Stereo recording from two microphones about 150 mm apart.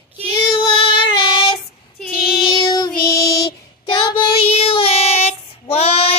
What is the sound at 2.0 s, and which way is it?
Child singing, centre (ahead or behind).